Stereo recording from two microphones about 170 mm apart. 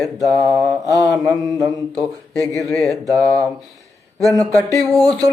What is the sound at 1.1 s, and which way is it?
Speech, centre (ahead or behind).